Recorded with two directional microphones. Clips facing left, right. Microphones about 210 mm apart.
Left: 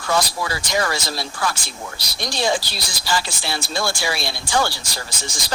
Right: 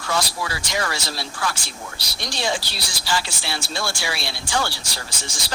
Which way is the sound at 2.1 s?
45° left (ahead or behind).